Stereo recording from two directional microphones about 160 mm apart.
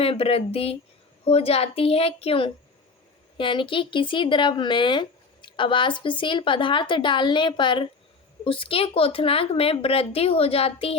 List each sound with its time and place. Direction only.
0.0 s speech: 35° left (ahead or behind)